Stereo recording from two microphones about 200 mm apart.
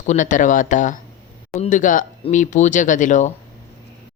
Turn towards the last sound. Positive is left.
turn(degrees=40)  # may be behind; listen again after turning